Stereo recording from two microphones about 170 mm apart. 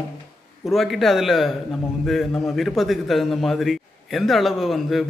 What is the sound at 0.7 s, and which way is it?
Speech, centre (ahead or behind).